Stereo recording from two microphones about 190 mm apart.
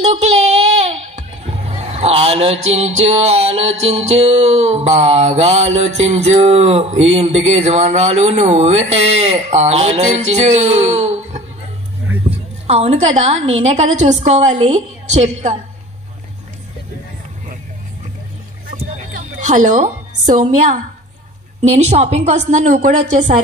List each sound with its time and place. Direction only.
0.1 s speech: 35° right (ahead or behind)
19.1 s a woman's voice: 40° right (ahead or behind)